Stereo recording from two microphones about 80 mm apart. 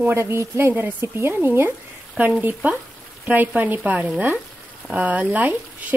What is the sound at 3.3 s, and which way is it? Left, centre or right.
Speech, right.